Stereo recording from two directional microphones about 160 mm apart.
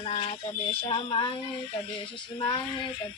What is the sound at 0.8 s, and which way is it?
Speech, 35° left (ahead or behind).